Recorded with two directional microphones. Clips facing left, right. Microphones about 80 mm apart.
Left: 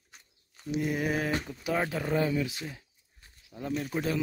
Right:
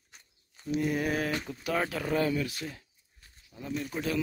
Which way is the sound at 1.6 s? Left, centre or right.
Centre.